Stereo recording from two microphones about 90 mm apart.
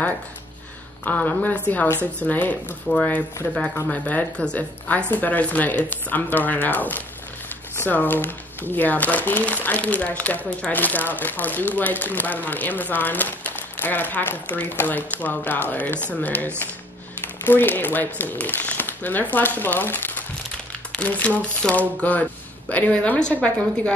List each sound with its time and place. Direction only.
1.0 s speech: 20° left (ahead or behind)